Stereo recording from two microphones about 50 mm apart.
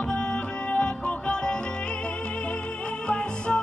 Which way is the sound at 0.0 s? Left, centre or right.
Left.